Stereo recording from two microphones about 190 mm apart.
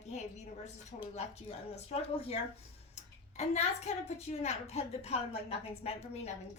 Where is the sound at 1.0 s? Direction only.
35° left (ahead or behind).